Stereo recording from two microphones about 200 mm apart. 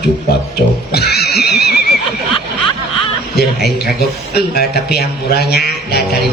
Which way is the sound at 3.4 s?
55° left (ahead or behind).